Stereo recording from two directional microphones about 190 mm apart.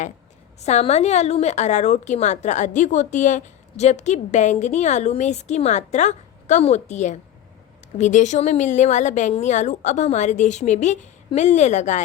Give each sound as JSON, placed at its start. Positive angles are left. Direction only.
{"t": 0.6, "sound": "a woman's voice", "side_deg": 35}